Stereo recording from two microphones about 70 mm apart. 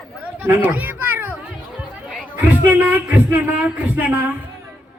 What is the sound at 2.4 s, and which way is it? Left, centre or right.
Speech, right.